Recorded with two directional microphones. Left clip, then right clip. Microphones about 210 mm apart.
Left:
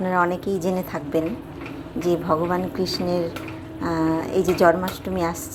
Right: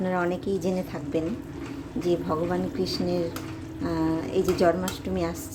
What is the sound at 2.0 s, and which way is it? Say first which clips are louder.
Speech: left 5 dB; centre (ahead or behind).